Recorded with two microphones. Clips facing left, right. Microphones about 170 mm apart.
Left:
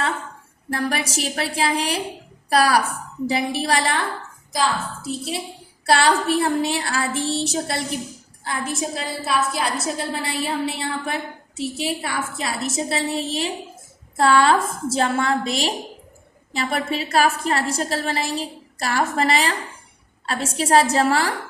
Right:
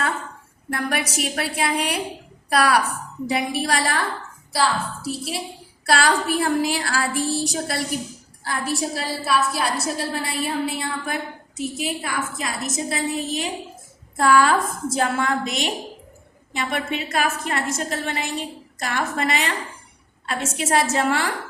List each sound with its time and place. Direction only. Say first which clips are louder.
0.7 s a woman's voice: left 1 dB; 30° left (ahead or behind)